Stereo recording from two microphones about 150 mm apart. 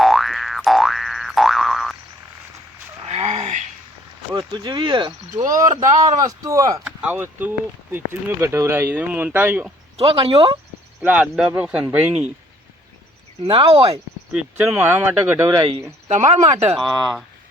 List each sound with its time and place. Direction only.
0.0 s boing: centre (ahead or behind)
3.1 s dog: 40° right (ahead or behind)
4.5 s speech: 30° right (ahead or behind)
5.3 s speech: 60° right (ahead or behind)
5.5 s speech: 20° right (ahead or behind)
6.8 s speech: 10° right (ahead or behind)
10.0 s speech: 40° right (ahead or behind)
11.0 s speech: 10° right (ahead or behind)
13.4 s speech: 40° right (ahead or behind)
14.8 s speech: 15° right (ahead or behind)
16.0 s speech: 50° right (ahead or behind)
16.7 s speech: centre (ahead or behind)